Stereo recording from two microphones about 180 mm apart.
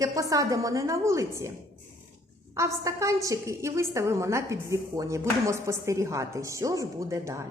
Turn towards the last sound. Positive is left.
turn(degrees=-15)  # may be behind; listen again after turning